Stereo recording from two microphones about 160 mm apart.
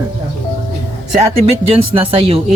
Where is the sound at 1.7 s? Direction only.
35° right (ahead or behind).